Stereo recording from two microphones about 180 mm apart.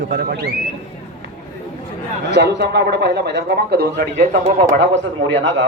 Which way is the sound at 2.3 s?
70° right (ahead or behind).